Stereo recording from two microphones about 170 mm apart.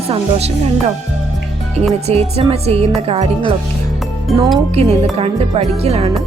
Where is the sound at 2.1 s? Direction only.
35° right (ahead or behind).